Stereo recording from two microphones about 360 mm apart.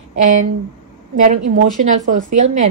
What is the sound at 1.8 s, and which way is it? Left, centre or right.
Speech, right.